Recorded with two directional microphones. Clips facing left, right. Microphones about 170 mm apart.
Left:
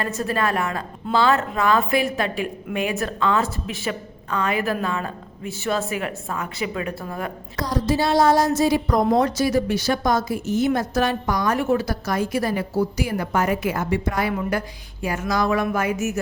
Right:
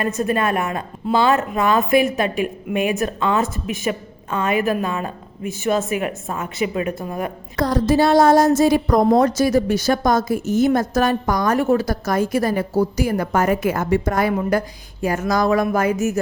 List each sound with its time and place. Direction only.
0.0 s a woman's voice: 20° right (ahead or behind)
7.5 s a woman's voice: 55° right (ahead or behind); by 16.2 s 40° right (ahead or behind)